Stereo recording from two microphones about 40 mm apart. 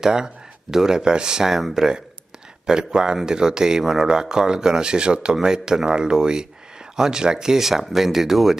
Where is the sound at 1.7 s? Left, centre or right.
Centre.